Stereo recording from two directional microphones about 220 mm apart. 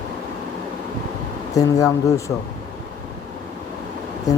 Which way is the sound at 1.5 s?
15° left (ahead or behind).